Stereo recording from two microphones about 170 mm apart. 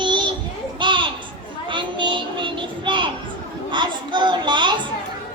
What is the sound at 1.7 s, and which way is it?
Child singing, 30° right (ahead or behind).